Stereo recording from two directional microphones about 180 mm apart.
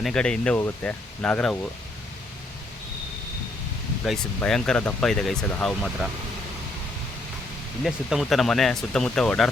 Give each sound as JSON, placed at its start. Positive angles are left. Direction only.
{"t": 0.0, "sound": "speech", "side_deg": 5}
{"t": 4.0, "sound": "speech", "side_deg": 0}
{"t": 7.9, "sound": "speech", "side_deg": 0}